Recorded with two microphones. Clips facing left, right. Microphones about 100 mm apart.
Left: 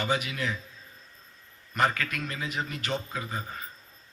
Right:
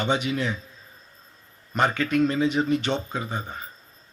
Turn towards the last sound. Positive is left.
turn(degrees=-25)  # may be behind; listen again after turning